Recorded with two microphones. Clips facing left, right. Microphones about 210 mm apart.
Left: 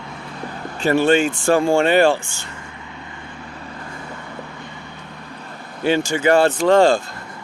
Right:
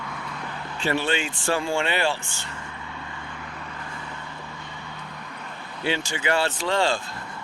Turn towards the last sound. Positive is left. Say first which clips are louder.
# left 10 dB
turn(degrees=45)  # may be behind; listen again after turning